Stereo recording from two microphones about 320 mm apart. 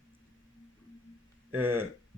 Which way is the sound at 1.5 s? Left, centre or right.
Centre.